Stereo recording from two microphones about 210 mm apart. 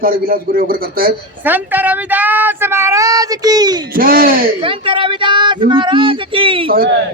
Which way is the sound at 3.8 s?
45° right (ahead or behind).